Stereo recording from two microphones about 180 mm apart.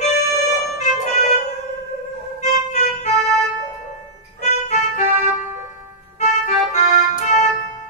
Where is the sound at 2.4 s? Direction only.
40° left (ahead or behind).